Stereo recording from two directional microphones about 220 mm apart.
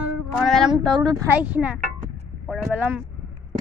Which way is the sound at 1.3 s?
5° right (ahead or behind).